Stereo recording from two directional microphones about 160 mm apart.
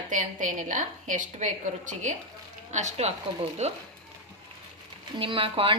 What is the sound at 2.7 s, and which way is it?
A woman's voice, 45° right (ahead or behind).